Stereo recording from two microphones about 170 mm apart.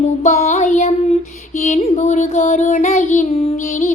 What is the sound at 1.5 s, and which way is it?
Child singing, 45° left (ahead or behind).